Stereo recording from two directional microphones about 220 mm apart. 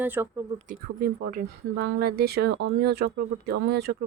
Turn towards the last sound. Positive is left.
turn(degrees=-50)  # may be behind; listen again after turning